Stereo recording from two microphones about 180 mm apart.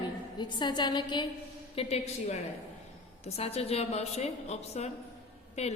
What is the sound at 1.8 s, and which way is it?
A woman's voice, 35° left (ahead or behind).